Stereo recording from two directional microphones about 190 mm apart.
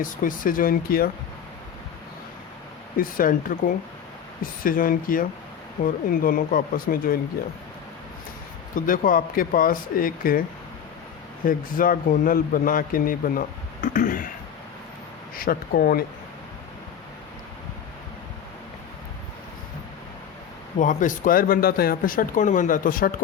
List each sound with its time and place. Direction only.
0.0 s speech: 45° left (ahead or behind)
3.0 s speech: 45° left (ahead or behind)
8.7 s speech: 45° left (ahead or behind)
11.4 s speech: 45° left (ahead or behind)
13.8 s a sound: 45° left (ahead or behind)
15.4 s speech: 50° left (ahead or behind)
20.7 s speech: 40° left (ahead or behind)